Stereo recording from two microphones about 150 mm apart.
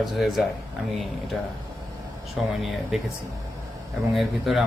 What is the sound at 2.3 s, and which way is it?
Speech, centre (ahead or behind).